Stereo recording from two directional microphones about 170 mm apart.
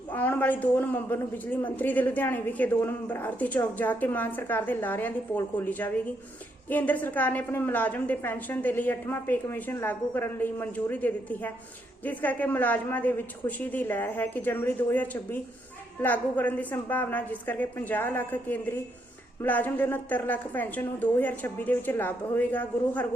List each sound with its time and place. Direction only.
0.1 s a woman's voice: 10° left (ahead or behind)